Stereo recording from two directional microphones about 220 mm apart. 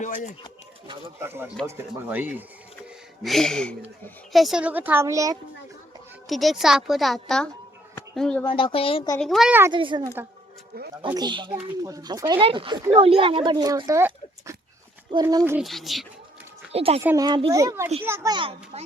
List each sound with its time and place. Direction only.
0.0 s speech: 35° left (ahead or behind)
1.2 s speech: 10° right (ahead or behind)
6.2 s speech: centre (ahead or behind)
8.4 s speech: 25° left (ahead or behind)
9.1 s speech: centre (ahead or behind)
9.7 s speech: 20° right (ahead or behind)
15.5 s speech: centre (ahead or behind)
16.7 s speech: 25° right (ahead or behind)
17.0 s speech: 15° right (ahead or behind)